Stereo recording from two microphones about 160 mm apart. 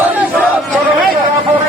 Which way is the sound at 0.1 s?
10° right (ahead or behind).